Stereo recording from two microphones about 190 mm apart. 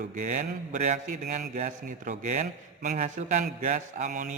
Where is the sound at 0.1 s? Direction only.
40° right (ahead or behind).